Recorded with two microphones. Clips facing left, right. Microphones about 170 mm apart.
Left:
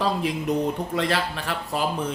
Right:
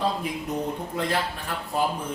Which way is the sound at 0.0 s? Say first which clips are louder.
Left 3 dB; 90° left.